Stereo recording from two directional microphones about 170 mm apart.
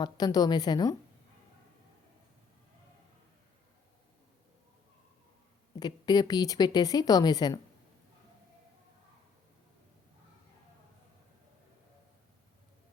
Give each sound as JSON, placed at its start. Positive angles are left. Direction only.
{"t": 0.0, "sound": "speech", "side_deg": 25}
{"t": 5.8, "sound": "speech", "side_deg": 25}